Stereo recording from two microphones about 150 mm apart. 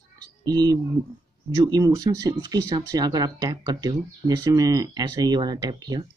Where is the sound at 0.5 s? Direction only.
25° right (ahead or behind).